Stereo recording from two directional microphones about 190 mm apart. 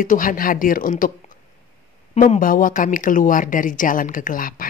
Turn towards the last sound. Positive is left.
turn(degrees=45)  # may be behind; listen again after turning